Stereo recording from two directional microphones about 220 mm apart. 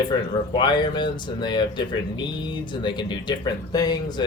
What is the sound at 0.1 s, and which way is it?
Speech, 20° left (ahead or behind).